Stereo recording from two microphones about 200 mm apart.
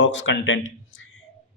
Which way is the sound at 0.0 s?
65° left (ahead or behind).